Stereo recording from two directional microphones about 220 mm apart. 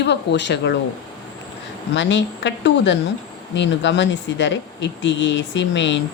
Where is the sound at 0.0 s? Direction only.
50° left (ahead or behind).